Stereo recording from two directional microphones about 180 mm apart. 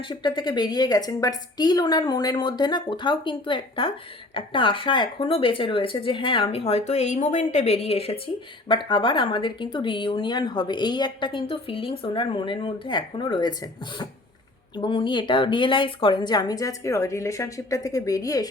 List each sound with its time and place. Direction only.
0.1 s speech: 25° left (ahead or behind)